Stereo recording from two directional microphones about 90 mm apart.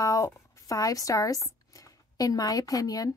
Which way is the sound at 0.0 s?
40° left (ahead or behind).